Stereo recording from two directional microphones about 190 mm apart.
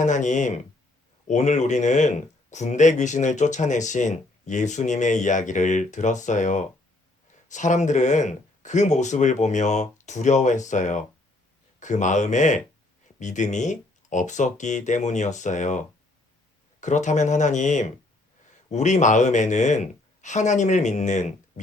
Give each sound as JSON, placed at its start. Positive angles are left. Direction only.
{"t": 0.0, "sound": "speech", "side_deg": 40}
{"t": 16.8, "sound": "speech", "side_deg": 40}